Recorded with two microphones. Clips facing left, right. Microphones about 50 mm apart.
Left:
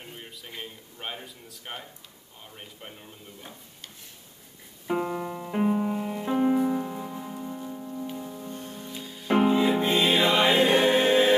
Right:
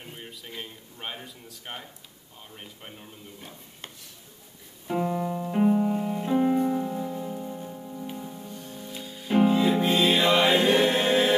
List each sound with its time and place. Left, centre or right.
0.0 s speech: centre
4.8 s music: centre
8.5 s music: left
8.9 s music: centre
9.5 s music: centre